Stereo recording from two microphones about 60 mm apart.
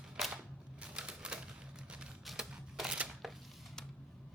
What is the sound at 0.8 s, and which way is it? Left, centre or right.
Typewriter, centre.